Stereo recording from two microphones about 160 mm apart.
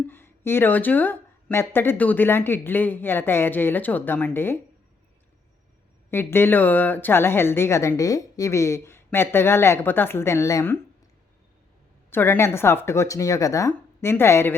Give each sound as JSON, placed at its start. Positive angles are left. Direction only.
{"t": 0.1, "sound": "a woman's voice", "side_deg": 15}
{"t": 6.1, "sound": "a woman's voice", "side_deg": 15}
{"t": 12.1, "sound": "a woman's voice", "side_deg": 15}